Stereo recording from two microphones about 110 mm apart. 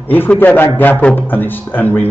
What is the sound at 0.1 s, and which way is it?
A man's voice, 15° left (ahead or behind).